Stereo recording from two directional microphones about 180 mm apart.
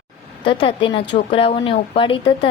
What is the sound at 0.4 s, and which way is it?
A woman's voice, 25° left (ahead or behind).